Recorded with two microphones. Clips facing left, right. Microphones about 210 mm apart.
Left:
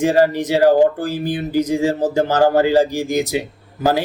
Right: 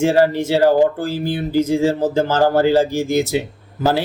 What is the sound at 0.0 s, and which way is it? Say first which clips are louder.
A man's voice: even; 15° left (ahead or behind).